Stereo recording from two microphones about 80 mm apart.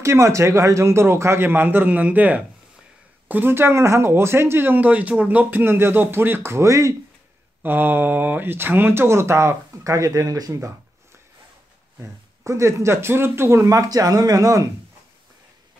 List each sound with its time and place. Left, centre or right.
0.0 s speech: right
7.6 s speech: right
12.0 s speech: right